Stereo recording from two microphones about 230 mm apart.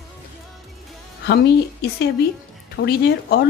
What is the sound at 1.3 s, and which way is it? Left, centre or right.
Speech, left.